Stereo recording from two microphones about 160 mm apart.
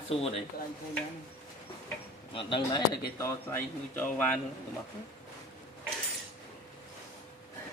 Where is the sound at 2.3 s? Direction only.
30° left (ahead or behind).